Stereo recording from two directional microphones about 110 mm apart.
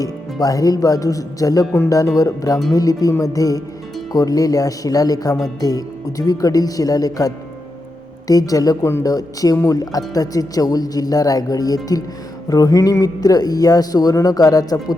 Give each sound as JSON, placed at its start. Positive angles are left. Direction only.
{"t": 0.0, "sound": "speech", "side_deg": 35}